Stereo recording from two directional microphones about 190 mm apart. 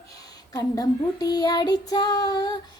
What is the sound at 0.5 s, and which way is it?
Child singing, 20° left (ahead or behind).